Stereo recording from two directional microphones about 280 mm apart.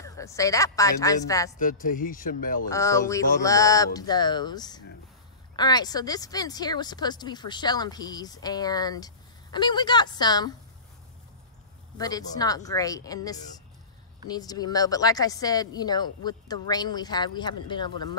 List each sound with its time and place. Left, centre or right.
0.0 s speech: centre
1.6 s speech: left
2.7 s speech: centre
12.0 s speech: centre